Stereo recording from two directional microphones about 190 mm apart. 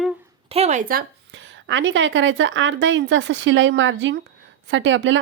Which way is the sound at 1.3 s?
75° right (ahead or behind).